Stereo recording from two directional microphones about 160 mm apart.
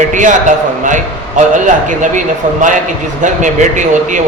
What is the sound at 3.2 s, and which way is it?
Speech, 50° right (ahead or behind).